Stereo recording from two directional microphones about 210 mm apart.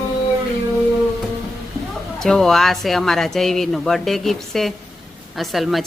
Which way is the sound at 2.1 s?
Centre (ahead or behind).